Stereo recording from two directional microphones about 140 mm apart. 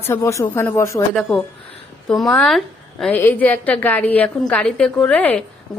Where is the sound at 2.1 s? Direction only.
5° left (ahead or behind).